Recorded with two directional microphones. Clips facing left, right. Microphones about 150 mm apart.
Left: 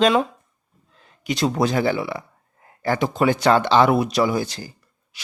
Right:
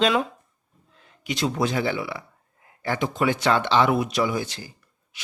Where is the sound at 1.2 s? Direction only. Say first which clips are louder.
Left 4 dB; 40° left (ahead or behind).